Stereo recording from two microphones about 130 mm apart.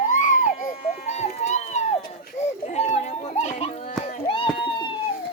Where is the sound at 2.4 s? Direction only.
60° left (ahead or behind).